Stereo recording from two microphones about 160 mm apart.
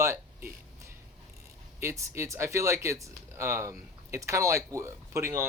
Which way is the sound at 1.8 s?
20° right (ahead or behind).